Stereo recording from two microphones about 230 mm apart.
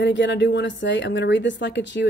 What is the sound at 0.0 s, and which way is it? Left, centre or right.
Speech, left.